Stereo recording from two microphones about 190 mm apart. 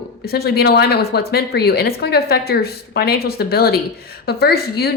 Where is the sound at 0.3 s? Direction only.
55° left (ahead or behind).